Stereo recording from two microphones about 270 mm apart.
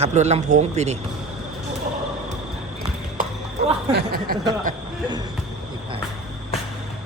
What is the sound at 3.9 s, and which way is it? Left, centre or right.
Speech, right.